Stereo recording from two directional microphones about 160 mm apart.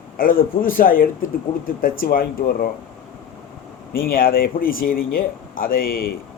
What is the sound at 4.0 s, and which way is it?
A man's voice, 65° left (ahead or behind).